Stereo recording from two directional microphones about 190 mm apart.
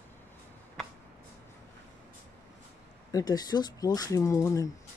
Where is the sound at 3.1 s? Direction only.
20° left (ahead or behind).